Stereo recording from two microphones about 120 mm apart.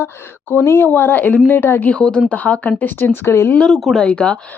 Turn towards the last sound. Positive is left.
turn(degrees=10)  # may be behind; listen again after turning